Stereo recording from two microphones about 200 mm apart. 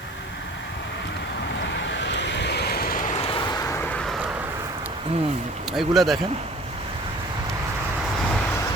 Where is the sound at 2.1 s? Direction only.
60° left (ahead or behind).